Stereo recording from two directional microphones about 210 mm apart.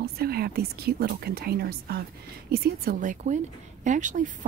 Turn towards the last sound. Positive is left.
turn(degrees=-35)  # may be behind; listen again after turning